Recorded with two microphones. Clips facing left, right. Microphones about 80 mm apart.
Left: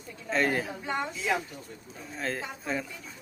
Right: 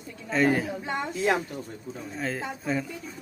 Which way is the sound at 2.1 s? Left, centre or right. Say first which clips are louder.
Right 1 dB; centre.